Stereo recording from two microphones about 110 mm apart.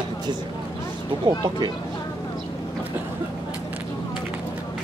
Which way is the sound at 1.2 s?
40° right (ahead or behind).